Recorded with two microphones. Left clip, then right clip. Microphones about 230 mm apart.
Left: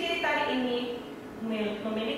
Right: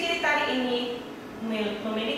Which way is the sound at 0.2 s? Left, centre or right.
Centre.